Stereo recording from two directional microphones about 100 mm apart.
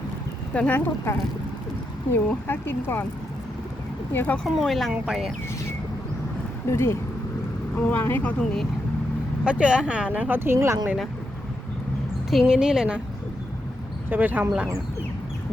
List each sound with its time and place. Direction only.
0.5 s speech: 15° left (ahead or behind)
2.1 s speech: 20° left (ahead or behind)
4.1 s speech: 20° left (ahead or behind)
4.4 s speech: centre (ahead or behind)
6.7 s speech: 25° left (ahead or behind); by 8.6 s 10° left (ahead or behind)
9.4 s speech: 10° right (ahead or behind); by 10.8 s 25° right (ahead or behind)
12.3 s speech: 5° right (ahead or behind)
14.1 s speech: 20° right (ahead or behind)